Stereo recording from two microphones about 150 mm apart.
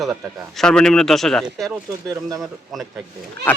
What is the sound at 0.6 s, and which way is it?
Speech, 5° left (ahead or behind).